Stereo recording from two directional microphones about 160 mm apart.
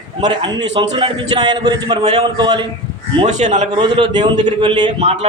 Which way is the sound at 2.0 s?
40° right (ahead or behind).